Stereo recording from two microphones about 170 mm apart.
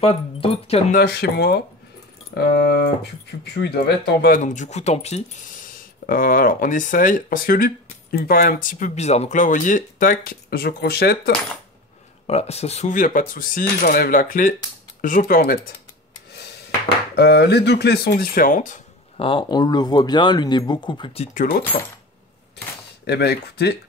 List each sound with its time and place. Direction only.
0.0 s speech: 35° left (ahead or behind)
0.9 s speech: 70° left (ahead or behind)
4.4 s speech: 45° left (ahead or behind)
5.6 s speech: 55° left (ahead or behind)
12.3 s speech: 40° left (ahead or behind); by 15.6 s 60° left (ahead or behind)
17.1 s speech: 75° left (ahead or behind); by 18.8 s 50° left (ahead or behind)
19.1 s speech: 30° left (ahead or behind)
21.3 s speech: 50° left (ahead or behind)
23.0 s speech: 75° left (ahead or behind)